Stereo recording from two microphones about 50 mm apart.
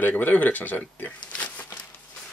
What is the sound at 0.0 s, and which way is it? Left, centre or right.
Speech, left.